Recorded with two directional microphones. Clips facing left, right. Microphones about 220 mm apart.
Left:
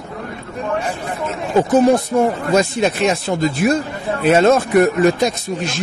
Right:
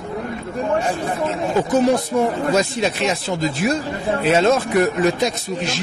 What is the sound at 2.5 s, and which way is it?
Speech, 50° left (ahead or behind).